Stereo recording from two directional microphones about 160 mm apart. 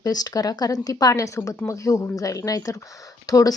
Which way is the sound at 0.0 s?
25° left (ahead or behind).